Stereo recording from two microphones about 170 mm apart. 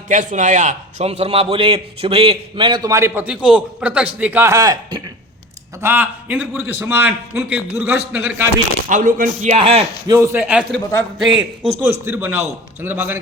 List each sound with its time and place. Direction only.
0.1 s a man's voice: 50° right (ahead or behind); by 5.0 s 25° right (ahead or behind)
5.8 s a man's voice: 15° right (ahead or behind)
8.9 s a man's voice: 50° right (ahead or behind)
10.1 s a man's voice: 15° right (ahead or behind)